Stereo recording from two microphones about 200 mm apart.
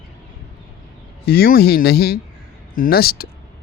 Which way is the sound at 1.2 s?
50° left (ahead or behind).